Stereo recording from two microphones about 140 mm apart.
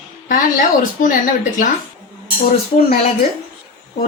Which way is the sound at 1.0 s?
75° left (ahead or behind).